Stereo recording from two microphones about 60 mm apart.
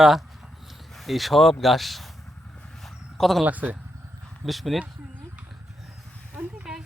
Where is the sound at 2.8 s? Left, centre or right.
Centre.